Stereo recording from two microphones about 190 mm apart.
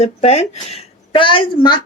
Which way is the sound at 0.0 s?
35° left (ahead or behind).